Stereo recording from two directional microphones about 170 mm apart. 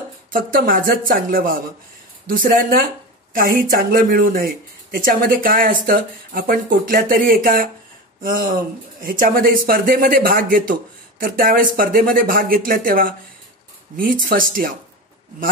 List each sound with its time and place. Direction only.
0.3 s speech: 55° right (ahead or behind)